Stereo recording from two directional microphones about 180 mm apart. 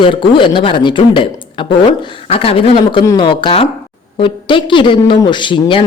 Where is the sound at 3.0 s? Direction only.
20° left (ahead or behind).